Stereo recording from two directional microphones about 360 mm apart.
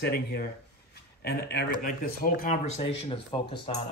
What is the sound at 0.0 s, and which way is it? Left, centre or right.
Speech, left.